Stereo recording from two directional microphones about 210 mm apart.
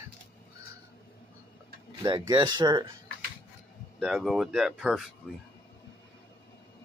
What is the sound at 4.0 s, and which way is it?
Speech, centre (ahead or behind).